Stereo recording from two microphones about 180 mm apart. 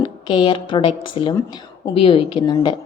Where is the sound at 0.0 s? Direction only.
25° left (ahead or behind).